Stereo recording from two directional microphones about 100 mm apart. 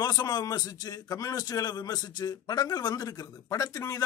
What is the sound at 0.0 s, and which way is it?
A man's voice, 40° left (ahead or behind).